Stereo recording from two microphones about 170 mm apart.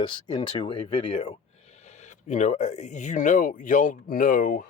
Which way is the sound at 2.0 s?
45° left (ahead or behind).